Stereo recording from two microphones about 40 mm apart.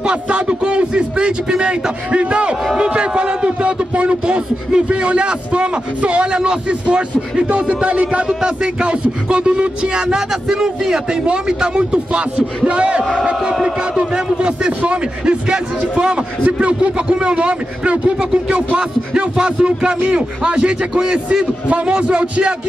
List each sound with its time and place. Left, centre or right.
0.0 s a man's voice: right
8.3 s a man's voice: centre